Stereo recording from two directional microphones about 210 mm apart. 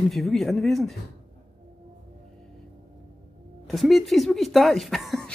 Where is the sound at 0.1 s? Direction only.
Centre (ahead or behind).